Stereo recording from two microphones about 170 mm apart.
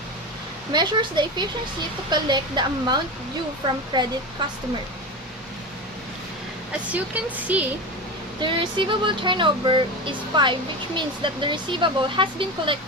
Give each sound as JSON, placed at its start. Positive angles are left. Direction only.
{"t": 0.7, "sound": "speech", "side_deg": -25}
{"t": 6.9, "sound": "speech", "side_deg": -10}
{"t": 8.4, "sound": "speech", "side_deg": -30}